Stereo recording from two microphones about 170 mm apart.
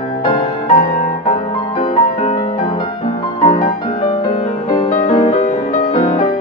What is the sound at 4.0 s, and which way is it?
Music, 40° left (ahead or behind).